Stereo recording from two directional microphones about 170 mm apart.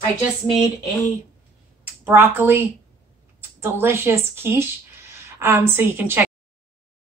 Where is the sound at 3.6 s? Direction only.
15° right (ahead or behind).